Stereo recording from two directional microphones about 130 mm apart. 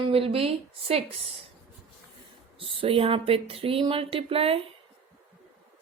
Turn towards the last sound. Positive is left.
turn(degrees=-45)  # may be behind; listen again after turning